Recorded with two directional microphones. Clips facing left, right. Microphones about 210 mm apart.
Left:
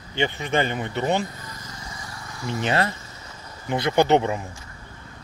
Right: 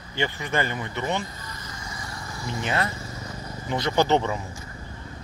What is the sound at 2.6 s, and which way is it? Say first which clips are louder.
Speech: left 4 dB; 30° left (ahead or behind).